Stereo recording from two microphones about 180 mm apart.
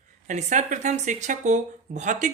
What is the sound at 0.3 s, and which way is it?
Speech, 45° right (ahead or behind).